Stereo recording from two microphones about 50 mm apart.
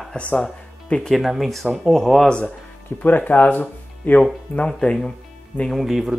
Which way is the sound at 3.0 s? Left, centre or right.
Left.